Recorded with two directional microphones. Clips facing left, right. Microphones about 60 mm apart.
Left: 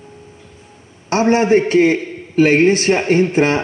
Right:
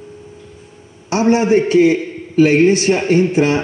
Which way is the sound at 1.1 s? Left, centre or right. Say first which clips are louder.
Even; left.